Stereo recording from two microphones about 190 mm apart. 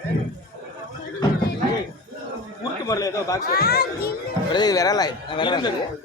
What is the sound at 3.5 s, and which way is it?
Speech, 55° left (ahead or behind).